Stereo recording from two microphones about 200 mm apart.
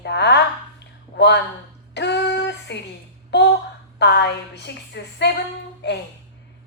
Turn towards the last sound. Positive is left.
turn(degrees=60)  # may be behind; listen again after turning